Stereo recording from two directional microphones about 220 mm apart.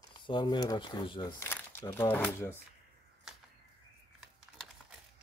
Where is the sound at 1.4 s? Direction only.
10° left (ahead or behind).